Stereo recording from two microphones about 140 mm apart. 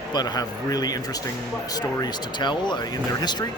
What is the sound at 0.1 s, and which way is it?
Speech, 30° left (ahead or behind).